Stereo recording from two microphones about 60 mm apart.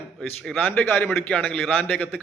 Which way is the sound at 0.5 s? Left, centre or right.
Left.